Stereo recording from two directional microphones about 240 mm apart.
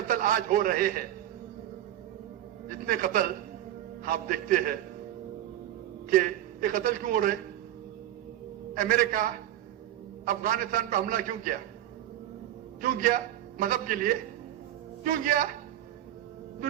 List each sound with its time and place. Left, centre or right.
0.1 s a man's voice: right
2.6 s a man's voice: right
6.1 s a man's voice: right
8.7 s a man's voice: right
12.8 s a man's voice: right